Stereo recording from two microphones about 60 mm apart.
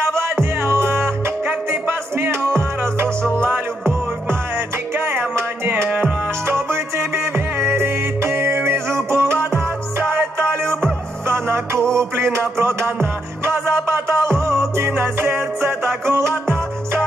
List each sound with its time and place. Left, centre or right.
0.0 s music: right